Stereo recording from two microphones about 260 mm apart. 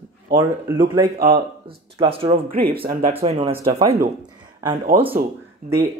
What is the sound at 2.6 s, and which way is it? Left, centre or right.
Speech, right.